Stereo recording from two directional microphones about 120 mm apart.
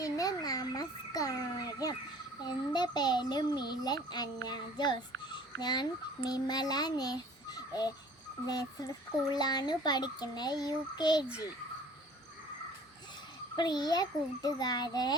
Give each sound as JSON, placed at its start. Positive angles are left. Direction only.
{"t": 0.0, "sound": "a sound", "side_deg": 30}
{"t": 2.5, "sound": "speech", "side_deg": 35}
{"t": 13.6, "sound": "speech", "side_deg": 35}